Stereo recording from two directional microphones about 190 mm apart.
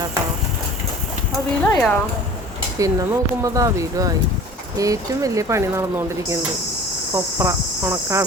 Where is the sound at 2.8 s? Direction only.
15° right (ahead or behind).